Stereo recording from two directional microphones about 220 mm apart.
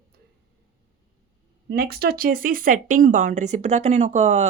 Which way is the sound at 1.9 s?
45° right (ahead or behind).